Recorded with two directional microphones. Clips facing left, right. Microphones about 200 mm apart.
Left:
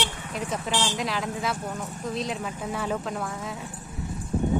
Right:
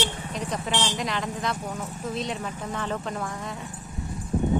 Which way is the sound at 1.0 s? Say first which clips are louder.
Even; centre (ahead or behind).